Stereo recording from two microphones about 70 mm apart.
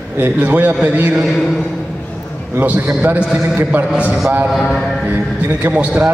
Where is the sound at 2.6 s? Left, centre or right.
Right.